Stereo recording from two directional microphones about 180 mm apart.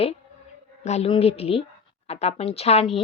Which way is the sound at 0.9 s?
35° left (ahead or behind).